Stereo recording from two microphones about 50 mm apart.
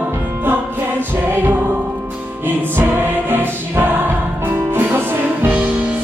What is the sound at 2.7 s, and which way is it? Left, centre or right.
Music, right.